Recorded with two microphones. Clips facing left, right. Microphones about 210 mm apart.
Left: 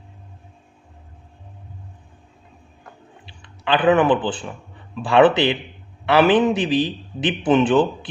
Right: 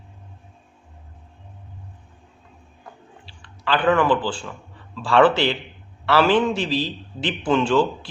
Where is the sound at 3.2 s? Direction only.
20° left (ahead or behind).